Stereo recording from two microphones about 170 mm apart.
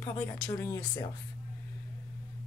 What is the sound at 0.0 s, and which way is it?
Speech, 15° left (ahead or behind).